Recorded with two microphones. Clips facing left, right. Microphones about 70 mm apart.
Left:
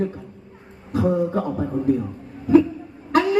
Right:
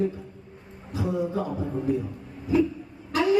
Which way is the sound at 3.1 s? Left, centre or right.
Left.